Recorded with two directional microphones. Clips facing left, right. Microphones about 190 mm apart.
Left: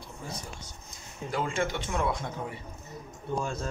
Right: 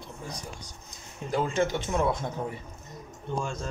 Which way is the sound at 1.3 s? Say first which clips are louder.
Right 4 dB; 20° right (ahead or behind).